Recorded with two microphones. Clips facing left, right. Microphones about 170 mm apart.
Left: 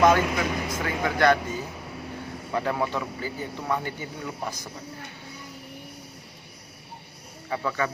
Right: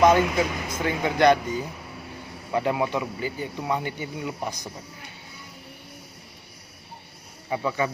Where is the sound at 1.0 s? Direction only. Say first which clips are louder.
Right 2 dB; 20° right (ahead or behind).